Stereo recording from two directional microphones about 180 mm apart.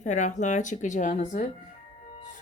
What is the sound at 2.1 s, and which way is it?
Music, 40° left (ahead or behind).